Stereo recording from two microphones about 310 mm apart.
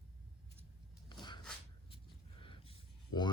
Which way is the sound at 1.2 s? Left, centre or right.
Centre.